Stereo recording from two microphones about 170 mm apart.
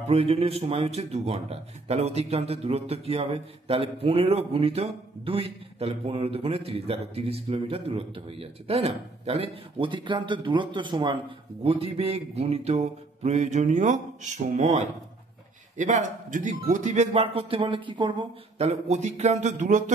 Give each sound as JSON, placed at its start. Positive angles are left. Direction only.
{"t": 0.1, "sound": "a man's voice", "side_deg": -35}
{"t": 18.6, "sound": "a man's voice", "side_deg": -40}